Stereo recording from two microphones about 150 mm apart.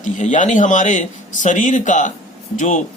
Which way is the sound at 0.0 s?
55° left (ahead or behind).